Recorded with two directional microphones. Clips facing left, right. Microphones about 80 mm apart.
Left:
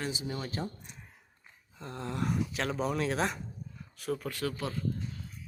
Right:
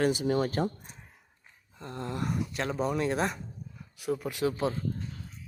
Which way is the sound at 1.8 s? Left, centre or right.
Centre.